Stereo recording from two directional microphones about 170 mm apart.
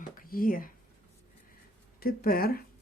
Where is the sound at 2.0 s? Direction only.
60° left (ahead or behind).